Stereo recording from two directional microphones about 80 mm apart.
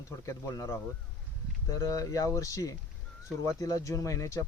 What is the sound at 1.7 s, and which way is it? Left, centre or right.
A man's voice, left.